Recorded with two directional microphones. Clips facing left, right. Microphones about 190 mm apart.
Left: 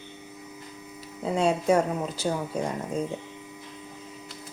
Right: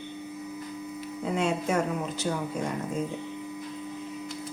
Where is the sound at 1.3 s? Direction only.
35° left (ahead or behind).